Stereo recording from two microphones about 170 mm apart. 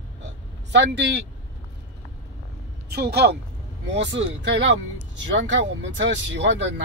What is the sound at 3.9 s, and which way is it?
Speech, 90° right.